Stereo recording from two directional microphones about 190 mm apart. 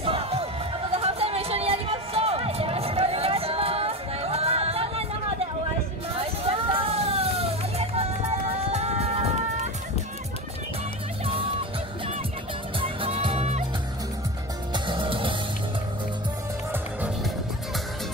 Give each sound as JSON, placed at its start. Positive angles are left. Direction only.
{"t": 0.0, "sound": "basketball bounce", "side_deg": -30}
{"t": 0.9, "sound": "a sound", "side_deg": -30}
{"t": 6.1, "sound": "music", "side_deg": -30}
{"t": 12.8, "sound": "music", "side_deg": -30}
{"t": 14.7, "sound": "music", "side_deg": -25}